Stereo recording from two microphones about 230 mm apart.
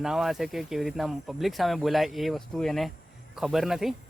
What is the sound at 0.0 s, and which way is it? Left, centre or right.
Speech, centre.